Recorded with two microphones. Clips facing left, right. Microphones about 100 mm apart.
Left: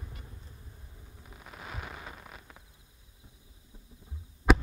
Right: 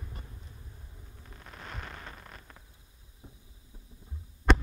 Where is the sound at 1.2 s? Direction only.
5° left (ahead or behind).